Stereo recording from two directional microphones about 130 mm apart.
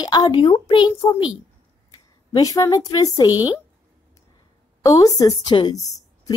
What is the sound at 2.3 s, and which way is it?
Speech, 25° left (ahead or behind).